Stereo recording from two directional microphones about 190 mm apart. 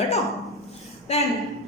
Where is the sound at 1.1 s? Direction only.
35° left (ahead or behind).